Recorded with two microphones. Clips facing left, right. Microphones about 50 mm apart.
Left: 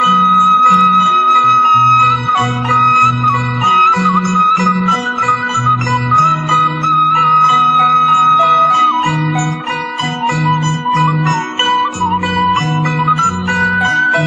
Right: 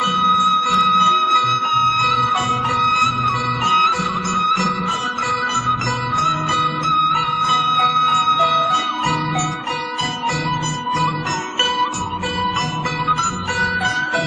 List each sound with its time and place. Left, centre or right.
0.7 s music: left
3.9 s music: left
6.5 s music: left
7.2 s music: left
7.5 s music: left
13.0 s music: left